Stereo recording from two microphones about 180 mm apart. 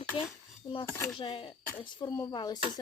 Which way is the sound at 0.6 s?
20° left (ahead or behind).